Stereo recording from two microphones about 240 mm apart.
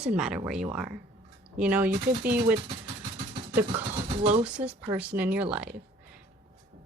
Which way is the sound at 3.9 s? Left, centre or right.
Right.